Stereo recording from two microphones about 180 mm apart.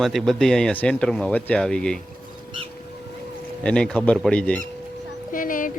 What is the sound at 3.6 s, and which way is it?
Speech, 5° left (ahead or behind).